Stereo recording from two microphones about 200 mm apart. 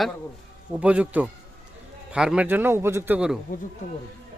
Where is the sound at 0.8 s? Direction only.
5° right (ahead or behind).